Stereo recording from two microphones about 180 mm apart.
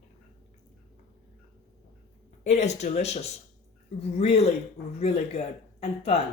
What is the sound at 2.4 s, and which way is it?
A woman's voice, 40° left (ahead or behind).